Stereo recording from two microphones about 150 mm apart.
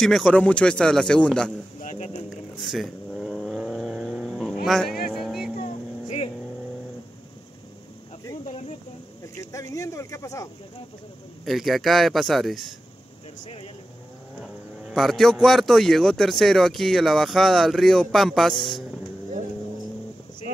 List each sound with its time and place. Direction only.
0.0 s speech: 5° left (ahead or behind)
1.8 s speech: 50° left (ahead or behind)
2.2 s cat: centre (ahead or behind)
4.6 s vehicle: centre (ahead or behind)
5.6 s vehicle: 40° left (ahead or behind)
8.5 s a sound: 40° left (ahead or behind)
9.2 s speech: 20° left (ahead or behind)
11.4 s speech: centre (ahead or behind)
14.4 s speech: centre (ahead or behind)